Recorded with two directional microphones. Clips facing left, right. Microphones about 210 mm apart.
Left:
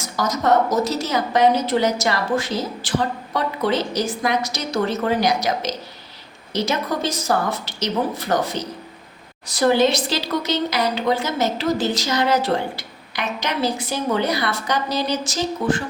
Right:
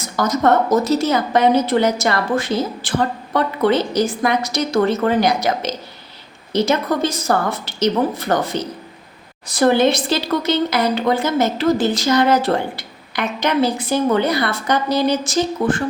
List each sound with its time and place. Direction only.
0.2 s speech: 55° right (ahead or behind)